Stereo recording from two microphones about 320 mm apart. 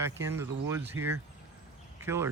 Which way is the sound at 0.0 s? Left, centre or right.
Centre.